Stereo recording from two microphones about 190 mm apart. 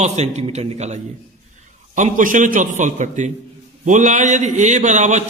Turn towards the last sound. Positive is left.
turn(degrees=-40)  # may be behind; listen again after turning